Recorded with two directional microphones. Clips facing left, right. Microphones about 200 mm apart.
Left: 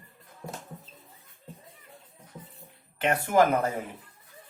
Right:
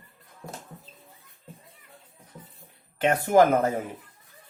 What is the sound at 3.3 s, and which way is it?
Speech, 45° right (ahead or behind).